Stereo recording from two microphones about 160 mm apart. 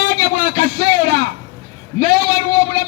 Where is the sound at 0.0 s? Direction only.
55° right (ahead or behind).